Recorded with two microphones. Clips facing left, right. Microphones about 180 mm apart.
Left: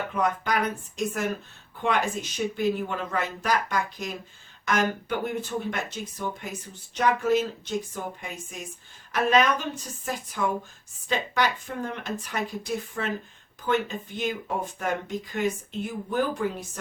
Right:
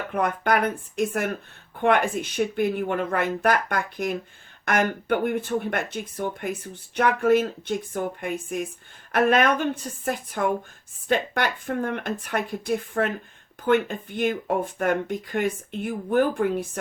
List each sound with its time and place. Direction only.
0.1 s speech: 55° right (ahead or behind)